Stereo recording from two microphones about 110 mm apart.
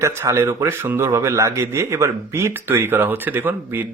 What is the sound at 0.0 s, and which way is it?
Speech, 25° right (ahead or behind).